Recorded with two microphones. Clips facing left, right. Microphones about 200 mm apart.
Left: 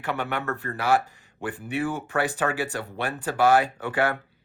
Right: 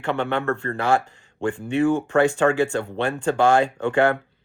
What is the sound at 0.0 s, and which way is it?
Speech, 25° right (ahead or behind).